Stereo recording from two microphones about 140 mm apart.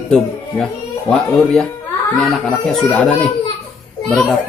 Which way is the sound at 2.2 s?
5° left (ahead or behind).